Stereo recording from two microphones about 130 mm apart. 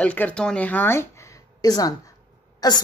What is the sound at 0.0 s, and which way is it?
Speech, 10° left (ahead or behind).